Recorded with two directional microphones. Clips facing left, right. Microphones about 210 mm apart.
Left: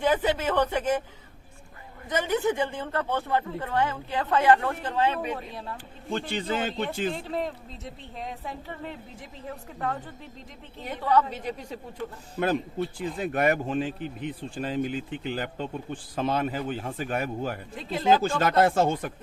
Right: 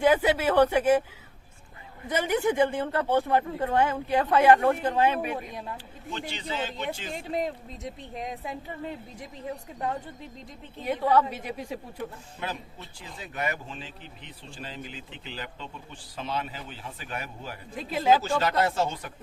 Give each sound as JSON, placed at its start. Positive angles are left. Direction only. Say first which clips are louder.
{"t": 0.0, "sound": "speech", "louder": "right 2 dB", "side_deg": -10}
{"t": 2.0, "sound": "speech", "louder": "even", "side_deg": -10}
{"t": 5.7, "sound": "a man's voice", "louder": "left 5 dB", "side_deg": 50}
{"t": 7.1, "sound": "speech", "louder": "even", "side_deg": -15}
{"t": 9.7, "sound": "speech", "louder": "left 2 dB", "side_deg": -15}
{"t": 13.0, "sound": "a man's voice", "louder": "left 7 dB", "side_deg": 55}
{"t": 17.7, "sound": "speech", "louder": "even", "side_deg": -5}
{"t": 18.2, "sound": "a man's voice", "louder": "left 3 dB", "side_deg": 50}